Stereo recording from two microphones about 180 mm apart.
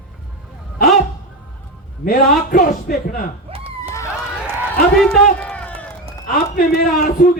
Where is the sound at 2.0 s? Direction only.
55° left (ahead or behind).